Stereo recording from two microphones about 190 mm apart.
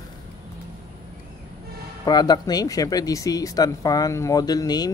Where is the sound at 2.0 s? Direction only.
20° left (ahead or behind).